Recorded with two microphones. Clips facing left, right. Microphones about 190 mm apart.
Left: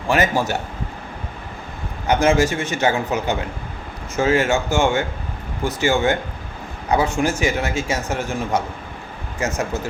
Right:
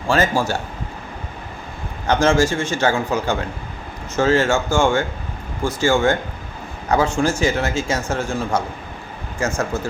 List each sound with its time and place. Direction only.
0.1 s a man's voice: 20° left (ahead or behind)
2.0 s a man's voice: 15° left (ahead or behind)
7.2 s a man's voice: 15° left (ahead or behind)